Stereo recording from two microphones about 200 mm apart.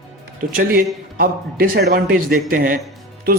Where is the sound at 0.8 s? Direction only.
45° right (ahead or behind).